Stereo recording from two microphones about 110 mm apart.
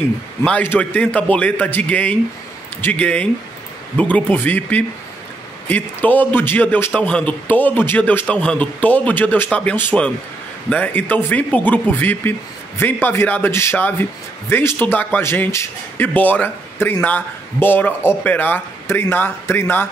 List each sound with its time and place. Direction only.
0.4 s a man's voice: 15° left (ahead or behind)